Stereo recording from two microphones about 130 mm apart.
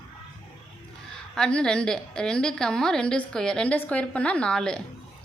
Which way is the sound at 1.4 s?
5° left (ahead or behind).